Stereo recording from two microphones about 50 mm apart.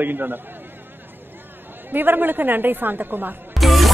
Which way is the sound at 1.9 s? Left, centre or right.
Right.